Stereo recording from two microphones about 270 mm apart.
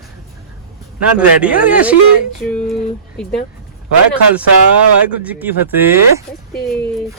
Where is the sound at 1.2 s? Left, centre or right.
Centre.